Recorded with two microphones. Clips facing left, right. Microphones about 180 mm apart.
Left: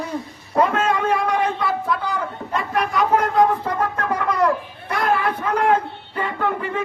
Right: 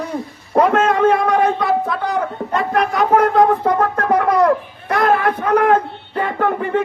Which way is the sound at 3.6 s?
55° right (ahead or behind).